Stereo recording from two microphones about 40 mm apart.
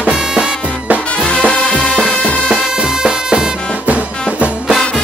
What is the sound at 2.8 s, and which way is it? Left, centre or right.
Music, centre.